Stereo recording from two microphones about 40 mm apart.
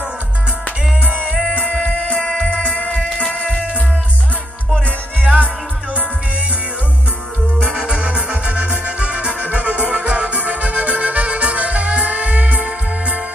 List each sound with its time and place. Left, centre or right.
1.0 s music: right
1.5 s music: left
2.9 s music: left
5.2 s music: right
7.7 s music: right